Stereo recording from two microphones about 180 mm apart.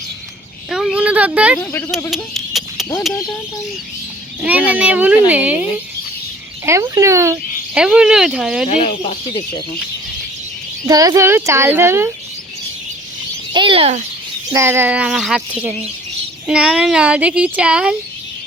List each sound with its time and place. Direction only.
0.7 s speech: 5° right (ahead or behind)
1.5 s speech: 15° left (ahead or behind)
2.0 s a sound: centre (ahead or behind)
4.4 s a child's voice: 10° right (ahead or behind)
7.8 s speech: 5° right (ahead or behind)
9.0 s speech: 25° left (ahead or behind)
10.8 s a child's voice: 20° right (ahead or behind)
13.5 s a child's voice: 25° right (ahead or behind)
14.5 s a child's voice: 15° right (ahead or behind)
16.5 s a child's voice: 5° right (ahead or behind)